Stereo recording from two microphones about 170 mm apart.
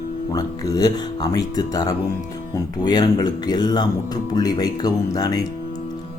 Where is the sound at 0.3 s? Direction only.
20° left (ahead or behind).